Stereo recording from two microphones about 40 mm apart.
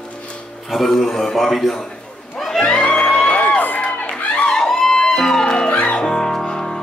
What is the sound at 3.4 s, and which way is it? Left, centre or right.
Crowd, left.